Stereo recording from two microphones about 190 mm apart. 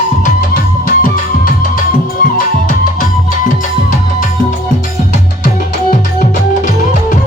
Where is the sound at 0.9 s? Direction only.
50° left (ahead or behind).